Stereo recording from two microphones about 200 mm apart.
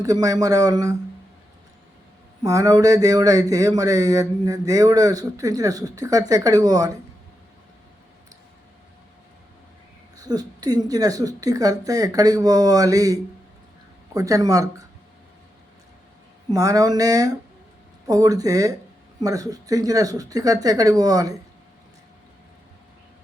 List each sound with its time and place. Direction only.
0.0 s speech: 15° right (ahead or behind)
2.4 s speech: 15° right (ahead or behind)
10.2 s speech: 20° right (ahead or behind)
16.5 s speech: 15° right (ahead or behind)